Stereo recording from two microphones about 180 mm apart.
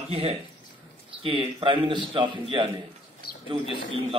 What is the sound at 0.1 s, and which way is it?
Speech, 35° right (ahead or behind).